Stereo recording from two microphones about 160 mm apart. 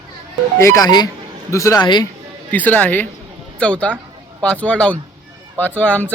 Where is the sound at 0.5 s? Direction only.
20° left (ahead or behind).